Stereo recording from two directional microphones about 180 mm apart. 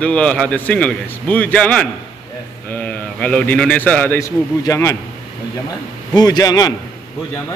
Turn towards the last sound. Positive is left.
turn(degrees=20)  # may be behind; listen again after turning